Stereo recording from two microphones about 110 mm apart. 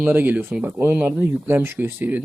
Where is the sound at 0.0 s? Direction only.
15° right (ahead or behind).